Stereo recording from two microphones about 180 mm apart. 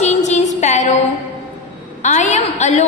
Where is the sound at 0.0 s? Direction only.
40° left (ahead or behind).